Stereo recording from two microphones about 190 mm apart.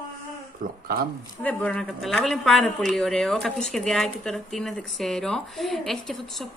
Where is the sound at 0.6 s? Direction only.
45° right (ahead or behind).